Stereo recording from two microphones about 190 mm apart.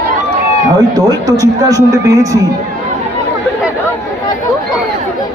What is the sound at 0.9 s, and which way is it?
Speech, 20° right (ahead or behind).